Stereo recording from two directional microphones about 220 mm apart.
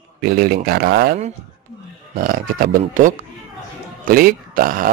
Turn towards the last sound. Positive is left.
turn(degrees=-40)  # may be behind; listen again after turning